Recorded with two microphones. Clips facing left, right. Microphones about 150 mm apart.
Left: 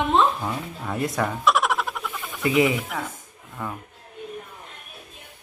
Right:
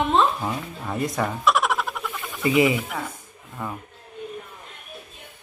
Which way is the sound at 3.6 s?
5° right (ahead or behind).